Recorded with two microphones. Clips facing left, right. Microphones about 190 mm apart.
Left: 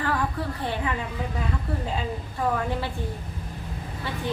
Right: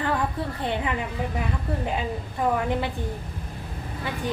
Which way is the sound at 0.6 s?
20° right (ahead or behind).